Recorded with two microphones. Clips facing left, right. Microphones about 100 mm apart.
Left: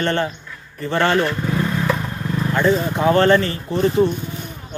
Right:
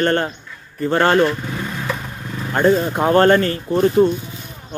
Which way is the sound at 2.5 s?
45° right (ahead or behind).